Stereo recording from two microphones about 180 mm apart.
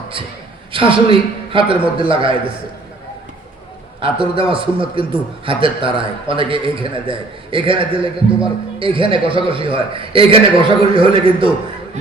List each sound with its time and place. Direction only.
0.7 s a sound: 30° right (ahead or behind)
1.5 s a man's voice: 30° right (ahead or behind)
4.0 s a man's voice: 30° right (ahead or behind)